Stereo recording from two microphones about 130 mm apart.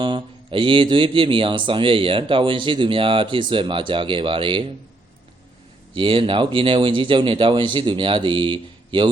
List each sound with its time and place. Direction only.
0.0 s speech: 40° right (ahead or behind)
5.9 s speech: 40° right (ahead or behind)